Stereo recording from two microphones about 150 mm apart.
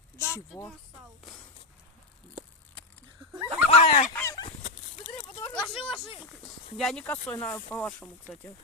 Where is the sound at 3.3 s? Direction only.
20° right (ahead or behind).